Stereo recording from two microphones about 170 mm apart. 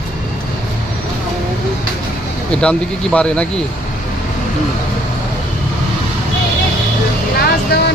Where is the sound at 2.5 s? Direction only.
5° left (ahead or behind).